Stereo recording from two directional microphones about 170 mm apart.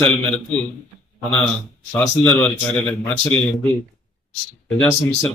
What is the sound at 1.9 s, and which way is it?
A man's voice, 10° left (ahead or behind).